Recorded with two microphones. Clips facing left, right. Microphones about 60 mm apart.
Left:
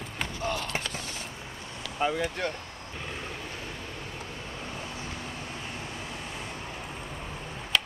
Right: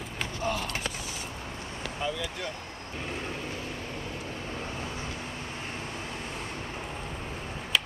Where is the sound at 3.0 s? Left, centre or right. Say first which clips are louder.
Right 3 dB; right.